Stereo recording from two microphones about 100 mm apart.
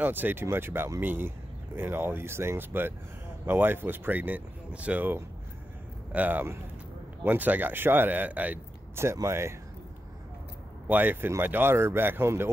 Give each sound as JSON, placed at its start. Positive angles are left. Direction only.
{"t": 0.0, "sound": "speech", "side_deg": -20}
{"t": 8.9, "sound": "speech", "side_deg": -30}
{"t": 10.9, "sound": "speech", "side_deg": -20}